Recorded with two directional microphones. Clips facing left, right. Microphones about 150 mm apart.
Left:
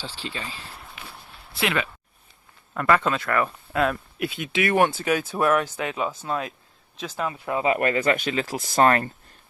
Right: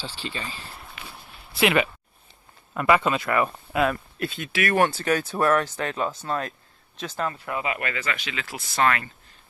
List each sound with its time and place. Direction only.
0.0 s speech: centre (ahead or behind)
1.5 s speech: 15° right (ahead or behind)
4.2 s speech: 10° left (ahead or behind)
7.3 s speech: 25° left (ahead or behind)
7.7 s speech: 40° left (ahead or behind)